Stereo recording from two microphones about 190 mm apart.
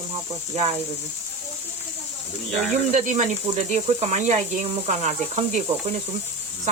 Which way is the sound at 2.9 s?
40° right (ahead or behind).